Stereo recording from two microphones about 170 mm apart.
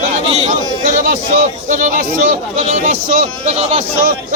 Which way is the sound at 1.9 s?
50° right (ahead or behind).